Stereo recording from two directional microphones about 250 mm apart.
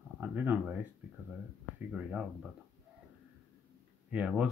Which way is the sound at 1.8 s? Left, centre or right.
Centre.